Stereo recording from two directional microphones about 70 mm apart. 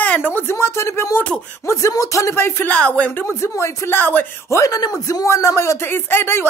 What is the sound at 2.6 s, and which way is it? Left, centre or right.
Speech, centre.